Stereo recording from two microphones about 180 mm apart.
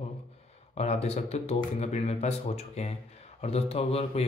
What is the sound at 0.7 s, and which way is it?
Speech, 35° left (ahead or behind).